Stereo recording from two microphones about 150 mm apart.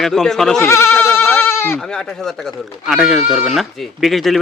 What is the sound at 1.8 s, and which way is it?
Speech, 5° left (ahead or behind).